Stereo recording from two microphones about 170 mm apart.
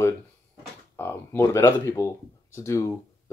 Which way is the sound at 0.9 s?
15° left (ahead or behind).